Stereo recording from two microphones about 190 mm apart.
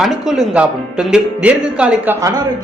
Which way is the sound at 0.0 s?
Centre (ahead or behind).